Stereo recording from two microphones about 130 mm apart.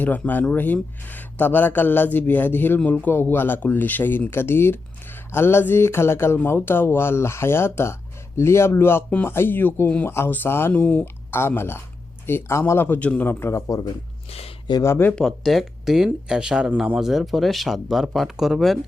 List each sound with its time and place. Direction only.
0.0 s speech: 15° left (ahead or behind)
14.3 s speech: 50° left (ahead or behind)
14.7 s speech: 20° left (ahead or behind)
15.2 s speech: centre (ahead or behind)